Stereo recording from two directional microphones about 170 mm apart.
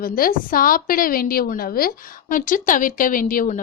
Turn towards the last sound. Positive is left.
turn(degrees=55)  # may be behind; listen again after turning